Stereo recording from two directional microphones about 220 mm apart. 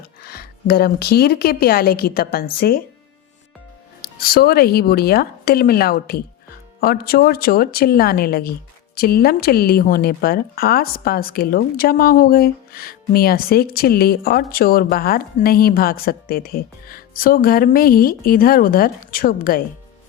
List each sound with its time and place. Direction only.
0.2 s speech: 45° left (ahead or behind)
4.0 s speech: 45° left (ahead or behind)